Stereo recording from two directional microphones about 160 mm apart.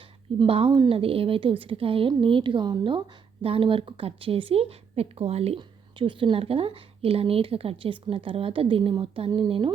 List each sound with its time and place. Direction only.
0.3 s a woman's voice: 35° right (ahead or behind)